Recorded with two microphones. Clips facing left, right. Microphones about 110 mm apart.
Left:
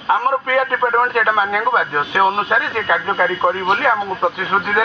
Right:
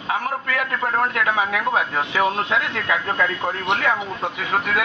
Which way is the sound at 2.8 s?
25° left (ahead or behind).